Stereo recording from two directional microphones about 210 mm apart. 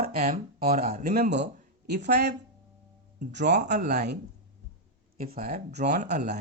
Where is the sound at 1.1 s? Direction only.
50° right (ahead or behind).